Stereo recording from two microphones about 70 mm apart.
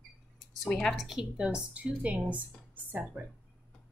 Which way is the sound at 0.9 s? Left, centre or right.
Centre.